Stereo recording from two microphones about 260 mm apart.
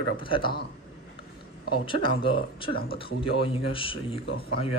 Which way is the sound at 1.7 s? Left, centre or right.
Centre.